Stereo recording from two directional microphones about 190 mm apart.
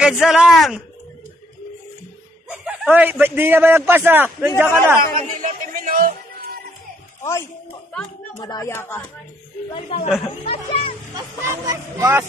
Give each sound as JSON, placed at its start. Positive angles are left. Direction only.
{"t": 0.0, "sound": "a man's voice", "side_deg": 0}
{"t": 2.5, "sound": "a man's voice", "side_deg": -10}
{"t": 5.4, "sound": "music", "side_deg": -45}
{"t": 7.2, "sound": "a man's voice", "side_deg": 15}
{"t": 8.5, "sound": "speech", "side_deg": 15}
{"t": 9.8, "sound": "speech", "side_deg": 30}
{"t": 11.1, "sound": "a man's voice", "side_deg": -20}